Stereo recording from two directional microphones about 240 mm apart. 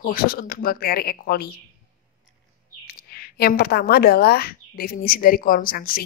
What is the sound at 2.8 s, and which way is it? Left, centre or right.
A woman's voice, left.